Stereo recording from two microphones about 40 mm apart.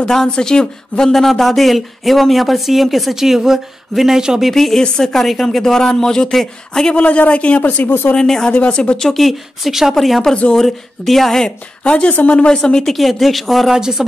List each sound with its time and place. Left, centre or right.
0.0 s speech: centre
4.5 s speech: centre
5.1 s speech: centre
5.6 s speech: centre
7.0 s a man's voice: left
7.6 s speech: left
8.2 s speech: centre
8.5 s speech: left
9.0 s speech: centre
9.7 s speech: centre
11.8 s speech: left
12.8 s speech: centre